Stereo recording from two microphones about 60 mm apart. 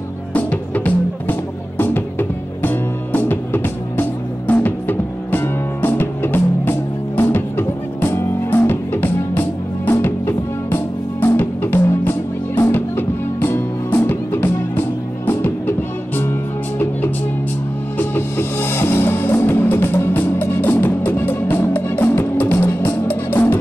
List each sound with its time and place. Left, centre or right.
0.3 s music: left
22.6 s music: left